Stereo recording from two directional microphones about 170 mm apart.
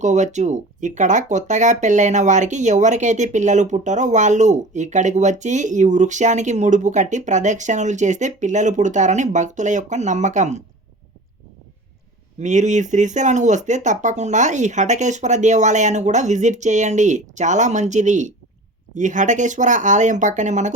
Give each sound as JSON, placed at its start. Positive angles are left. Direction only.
{"t": 0.0, "sound": "speech", "side_deg": -45}
{"t": 12.4, "sound": "speech", "side_deg": -45}